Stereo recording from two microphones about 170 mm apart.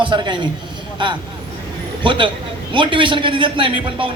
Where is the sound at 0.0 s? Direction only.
30° right (ahead or behind).